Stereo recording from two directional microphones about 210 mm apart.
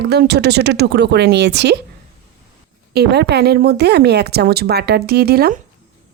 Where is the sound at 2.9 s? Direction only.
50° right (ahead or behind).